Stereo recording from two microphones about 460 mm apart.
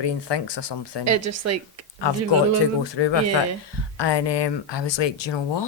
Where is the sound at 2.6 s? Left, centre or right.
Left.